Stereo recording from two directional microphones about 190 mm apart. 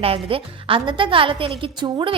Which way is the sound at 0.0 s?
30° right (ahead or behind).